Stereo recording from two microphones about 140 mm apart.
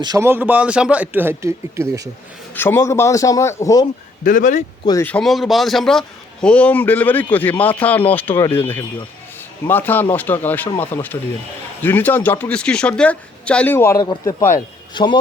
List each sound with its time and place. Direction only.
0.0 s speech: 30° right (ahead or behind)
0.3 s a man's voice: 10° right (ahead or behind)
2.6 s a man's voice: 15° left (ahead or behind)
4.2 s speech: 70° left (ahead or behind)
5.0 s a man's voice: 5° left (ahead or behind)
9.6 s a man's voice: 15° left (ahead or behind); by 15.2 s 35° left (ahead or behind)